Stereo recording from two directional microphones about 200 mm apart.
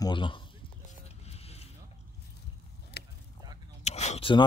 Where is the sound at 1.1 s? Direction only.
30° left (ahead or behind).